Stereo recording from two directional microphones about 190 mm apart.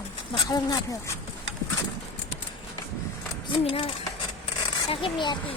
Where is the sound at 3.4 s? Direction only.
25° left (ahead or behind).